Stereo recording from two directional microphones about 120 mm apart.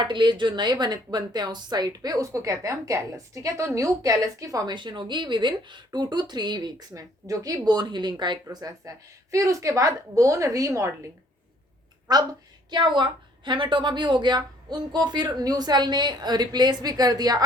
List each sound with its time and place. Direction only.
0.0 s speech: 40° right (ahead or behind)
8.4 s a woman's voice: 25° right (ahead or behind)
12.1 s speech: 35° right (ahead or behind)